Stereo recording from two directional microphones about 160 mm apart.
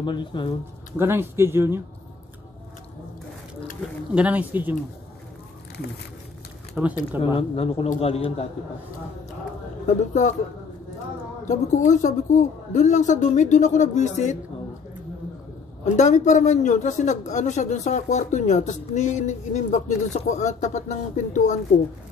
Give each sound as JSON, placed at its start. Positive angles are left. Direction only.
{"t": 0.0, "sound": "speech", "side_deg": 30}
{"t": 0.9, "sound": "speech", "side_deg": -15}
{"t": 4.1, "sound": "speech", "side_deg": -10}
{"t": 6.8, "sound": "speech", "side_deg": -5}
{"t": 7.3, "sound": "speech", "side_deg": 35}
{"t": 9.8, "sound": "speech", "side_deg": 50}
{"t": 11.4, "sound": "speech", "side_deg": 50}
{"t": 15.8, "sound": "speech", "side_deg": 45}